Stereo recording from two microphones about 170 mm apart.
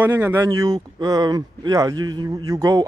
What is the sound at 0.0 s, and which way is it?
Speech, 15° right (ahead or behind).